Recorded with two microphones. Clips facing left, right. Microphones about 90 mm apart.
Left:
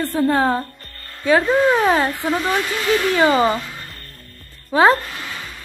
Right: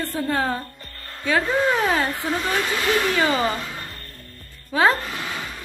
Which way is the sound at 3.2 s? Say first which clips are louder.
Left 6 dB; 40° left (ahead or behind).